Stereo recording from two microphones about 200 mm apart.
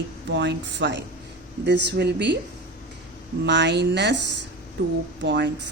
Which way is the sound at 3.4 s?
60° right (ahead or behind).